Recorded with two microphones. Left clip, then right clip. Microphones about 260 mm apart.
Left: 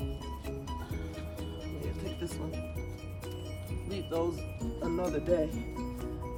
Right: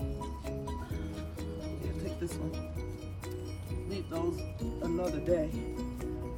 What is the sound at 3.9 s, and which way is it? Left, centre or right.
Music, centre.